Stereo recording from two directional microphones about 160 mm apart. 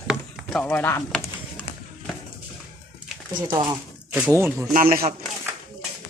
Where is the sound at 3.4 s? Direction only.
25° right (ahead or behind).